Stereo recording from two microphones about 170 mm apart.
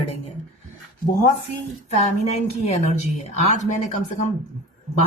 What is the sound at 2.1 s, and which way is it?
A woman's voice, 40° left (ahead or behind).